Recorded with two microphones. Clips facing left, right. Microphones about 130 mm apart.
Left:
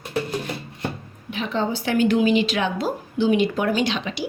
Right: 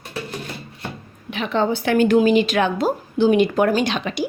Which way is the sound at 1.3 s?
65° right (ahead or behind).